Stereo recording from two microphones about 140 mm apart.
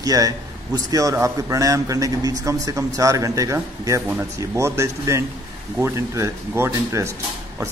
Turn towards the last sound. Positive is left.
turn(degrees=-20)  # may be behind; listen again after turning